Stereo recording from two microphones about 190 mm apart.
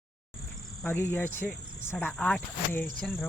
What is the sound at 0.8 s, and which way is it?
Speech, 10° left (ahead or behind).